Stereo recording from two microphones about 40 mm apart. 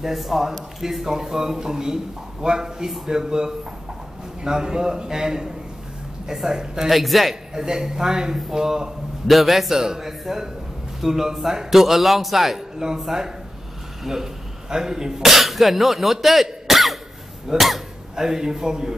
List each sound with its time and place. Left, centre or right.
0.0 s a man's voice: centre
6.9 s a man's voice: centre
7.5 s a man's voice: centre
9.3 s a man's voice: centre
18.1 s a man's voice: centre